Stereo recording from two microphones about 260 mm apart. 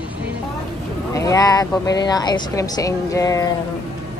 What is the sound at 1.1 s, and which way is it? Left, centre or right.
Speech, centre.